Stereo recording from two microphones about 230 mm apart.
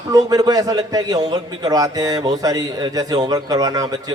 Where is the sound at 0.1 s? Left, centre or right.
Centre.